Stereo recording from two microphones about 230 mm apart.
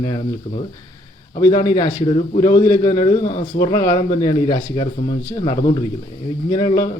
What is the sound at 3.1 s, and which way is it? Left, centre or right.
Speech, left.